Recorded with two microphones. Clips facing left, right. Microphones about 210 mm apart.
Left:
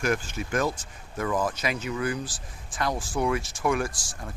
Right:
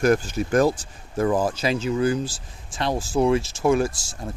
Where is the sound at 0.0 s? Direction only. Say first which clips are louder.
Right 8 dB; 40° right (ahead or behind).